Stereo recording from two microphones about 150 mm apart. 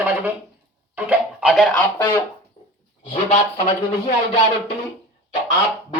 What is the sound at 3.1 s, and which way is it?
Speech, 55° left (ahead or behind).